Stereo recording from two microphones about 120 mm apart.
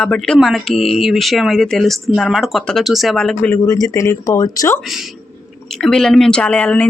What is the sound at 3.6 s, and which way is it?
Speech, 30° left (ahead or behind).